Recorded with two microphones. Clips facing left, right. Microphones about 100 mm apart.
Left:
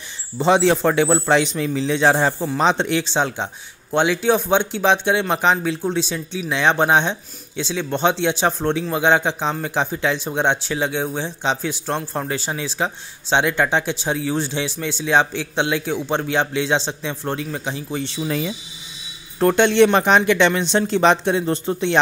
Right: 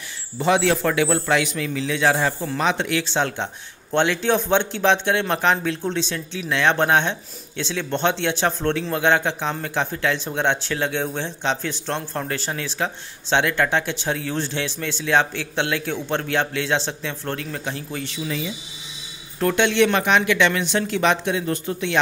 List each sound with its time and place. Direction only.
0.4 s a man's voice: 25° left (ahead or behind)
19.4 s speech: 35° left (ahead or behind)